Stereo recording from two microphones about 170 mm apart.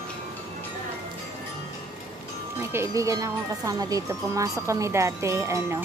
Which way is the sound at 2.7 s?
15° right (ahead or behind).